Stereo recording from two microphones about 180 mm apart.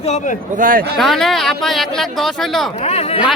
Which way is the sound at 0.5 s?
50° right (ahead or behind).